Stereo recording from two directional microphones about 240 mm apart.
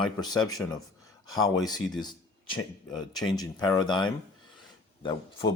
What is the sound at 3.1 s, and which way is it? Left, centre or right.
Speech, centre.